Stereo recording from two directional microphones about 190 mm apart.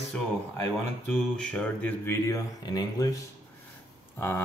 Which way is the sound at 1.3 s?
5° left (ahead or behind).